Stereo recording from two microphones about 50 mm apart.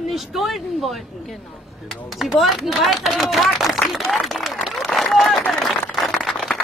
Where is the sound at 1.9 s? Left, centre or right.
Centre.